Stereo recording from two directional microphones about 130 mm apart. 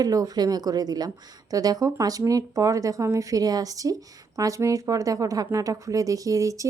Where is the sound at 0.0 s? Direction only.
30° right (ahead or behind).